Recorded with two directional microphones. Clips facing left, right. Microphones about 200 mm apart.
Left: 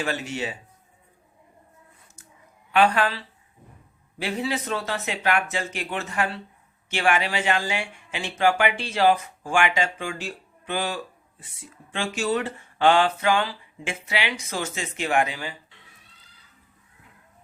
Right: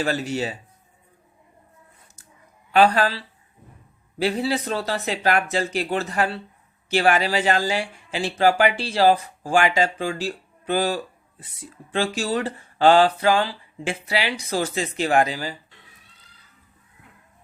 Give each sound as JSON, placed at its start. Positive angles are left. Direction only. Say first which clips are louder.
{"t": 0.0, "sound": "speech", "louder": "right 4 dB", "side_deg": -35}
{"t": 2.7, "sound": "speech", "louder": "right 3 dB", "side_deg": -35}